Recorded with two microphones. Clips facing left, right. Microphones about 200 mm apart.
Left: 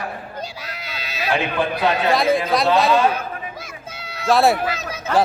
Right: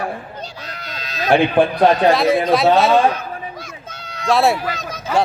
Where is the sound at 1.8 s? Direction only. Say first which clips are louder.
Right 6 dB; 45° right (ahead or behind).